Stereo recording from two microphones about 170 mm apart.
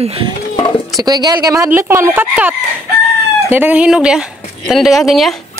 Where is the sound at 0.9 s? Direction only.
25° right (ahead or behind); by 5.3 s centre (ahead or behind).